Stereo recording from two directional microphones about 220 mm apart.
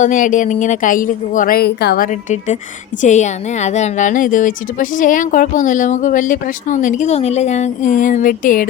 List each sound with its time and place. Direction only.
0.0 s speech: 35° left (ahead or behind)
3.0 s speech: 35° left (ahead or behind)